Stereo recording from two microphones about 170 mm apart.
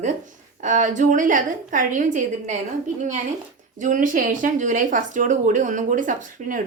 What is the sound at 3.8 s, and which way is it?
A woman's voice, 50° right (ahead or behind).